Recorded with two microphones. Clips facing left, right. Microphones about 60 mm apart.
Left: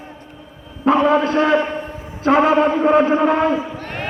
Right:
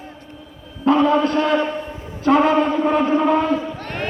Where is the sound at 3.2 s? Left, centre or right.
Left; by 4.1 s centre.